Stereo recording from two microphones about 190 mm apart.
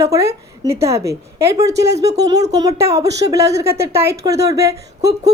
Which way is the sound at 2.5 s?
20° right (ahead or behind).